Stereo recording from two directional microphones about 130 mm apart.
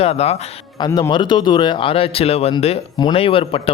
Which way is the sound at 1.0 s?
40° left (ahead or behind).